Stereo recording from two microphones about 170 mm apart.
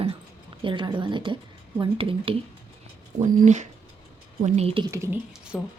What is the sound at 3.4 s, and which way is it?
Speech, 45° right (ahead or behind).